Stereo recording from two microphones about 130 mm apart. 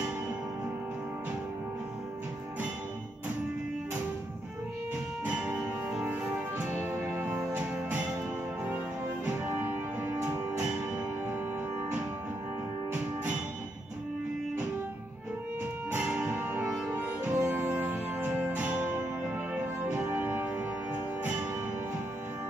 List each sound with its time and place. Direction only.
5.2 s music: 10° right (ahead or behind)
9.5 s music: 15° right (ahead or behind)
15.9 s music: 10° right (ahead or behind)
16.9 s music: 15° right (ahead or behind)